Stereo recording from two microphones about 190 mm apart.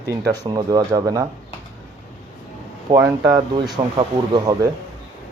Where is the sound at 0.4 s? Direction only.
20° right (ahead or behind).